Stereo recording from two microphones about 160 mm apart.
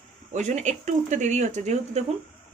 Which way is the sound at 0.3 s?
45° right (ahead or behind).